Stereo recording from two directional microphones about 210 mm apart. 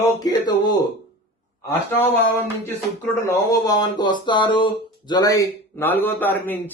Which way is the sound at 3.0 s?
15° left (ahead or behind).